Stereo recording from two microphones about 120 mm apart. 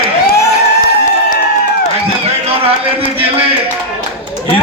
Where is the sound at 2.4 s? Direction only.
50° right (ahead or behind).